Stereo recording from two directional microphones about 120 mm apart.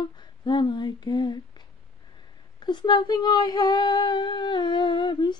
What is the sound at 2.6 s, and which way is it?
Speech, 40° left (ahead or behind).